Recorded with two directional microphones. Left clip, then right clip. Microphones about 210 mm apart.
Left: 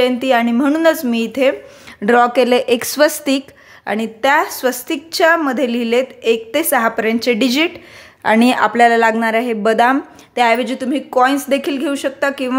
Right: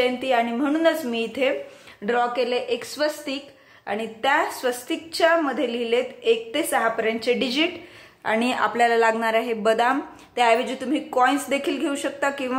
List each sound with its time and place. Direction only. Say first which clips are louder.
0.0 s speech: left 7 dB; 45° left (ahead or behind)